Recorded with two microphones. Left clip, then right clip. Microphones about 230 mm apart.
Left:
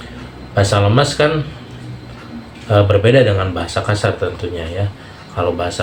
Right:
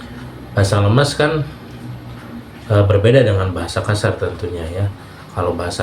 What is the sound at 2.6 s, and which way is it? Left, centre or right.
Speech, right.